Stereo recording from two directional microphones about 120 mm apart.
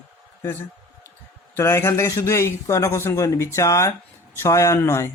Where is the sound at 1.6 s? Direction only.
20° left (ahead or behind).